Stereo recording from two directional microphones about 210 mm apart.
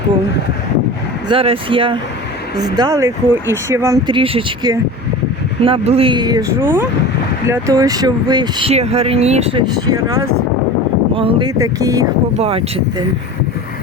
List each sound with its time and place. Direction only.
1.3 s speech: 25° right (ahead or behind)
11.1 s speech: 25° right (ahead or behind)
12.4 s speech: 25° right (ahead or behind)